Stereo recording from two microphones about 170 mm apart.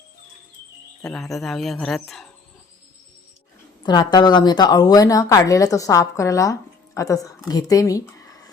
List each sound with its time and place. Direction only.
1.0 s speech: 5° left (ahead or behind)
3.8 s a woman's voice: 25° left (ahead or behind)